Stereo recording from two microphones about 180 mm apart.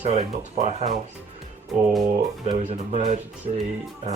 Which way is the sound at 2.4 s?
35° right (ahead or behind).